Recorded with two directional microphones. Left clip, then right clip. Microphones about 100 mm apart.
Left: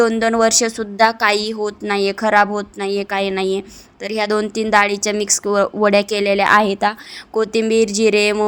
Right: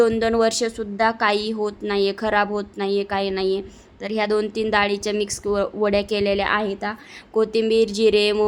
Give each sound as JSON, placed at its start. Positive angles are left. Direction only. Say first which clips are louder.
{"t": 0.0, "sound": "a woman's voice", "louder": "left 3 dB", "side_deg": 20}
{"t": 4.4, "sound": "speech", "louder": "left 7 dB", "side_deg": 20}
{"t": 6.5, "sound": "a woman's voice", "louder": "left 9 dB", "side_deg": 50}
{"t": 7.3, "sound": "a woman's voice", "louder": "left 2 dB", "side_deg": 25}